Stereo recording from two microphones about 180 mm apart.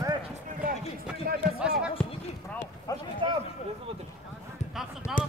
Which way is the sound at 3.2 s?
25° right (ahead or behind).